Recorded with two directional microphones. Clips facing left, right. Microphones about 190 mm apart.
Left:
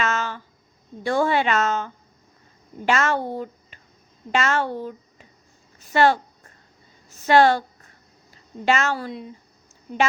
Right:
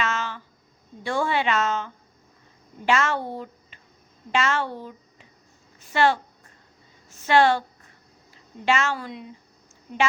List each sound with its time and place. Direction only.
0.0 s a sound: 45° left (ahead or behind)
1.0 s a woman's voice: 40° left (ahead or behind)
7.2 s a woman's voice: 40° left (ahead or behind)
8.6 s a woman's voice: 40° left (ahead or behind)